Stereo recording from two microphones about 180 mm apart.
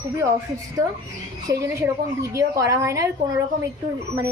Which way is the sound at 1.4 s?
20° right (ahead or behind).